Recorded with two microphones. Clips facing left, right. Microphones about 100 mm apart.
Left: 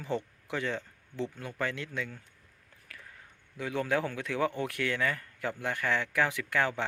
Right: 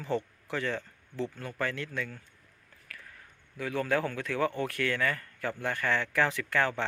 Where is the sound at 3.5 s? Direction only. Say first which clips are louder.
Right 1 dB; 20° left (ahead or behind).